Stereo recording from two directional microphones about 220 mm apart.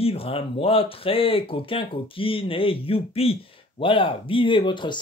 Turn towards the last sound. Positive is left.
turn(degrees=20)  # may be behind; listen again after turning